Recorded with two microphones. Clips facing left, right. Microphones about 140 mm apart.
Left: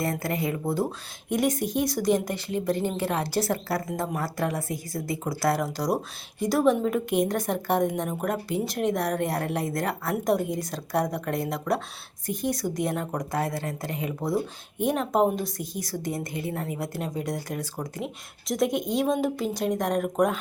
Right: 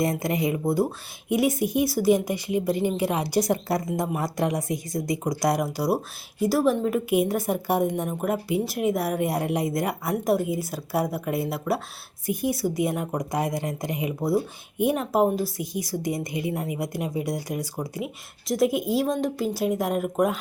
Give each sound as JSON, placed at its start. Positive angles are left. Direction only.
{"t": 0.0, "sound": "a woman's voice", "side_deg": -20}